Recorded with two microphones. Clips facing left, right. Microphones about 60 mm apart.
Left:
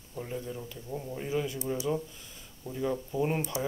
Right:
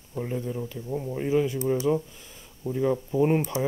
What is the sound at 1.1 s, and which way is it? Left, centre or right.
Speech, right.